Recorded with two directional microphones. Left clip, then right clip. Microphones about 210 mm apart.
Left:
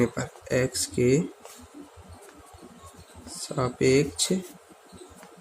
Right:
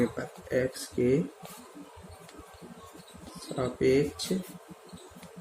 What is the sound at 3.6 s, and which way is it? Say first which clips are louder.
Speech: left 3 dB; 45° left (ahead or behind).